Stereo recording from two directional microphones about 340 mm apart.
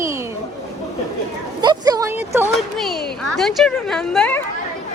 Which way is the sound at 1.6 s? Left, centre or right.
Centre.